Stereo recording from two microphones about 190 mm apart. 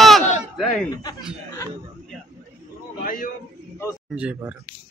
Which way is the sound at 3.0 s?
50° left (ahead or behind).